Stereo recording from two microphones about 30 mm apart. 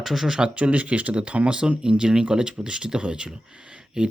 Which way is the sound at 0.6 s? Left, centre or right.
Right.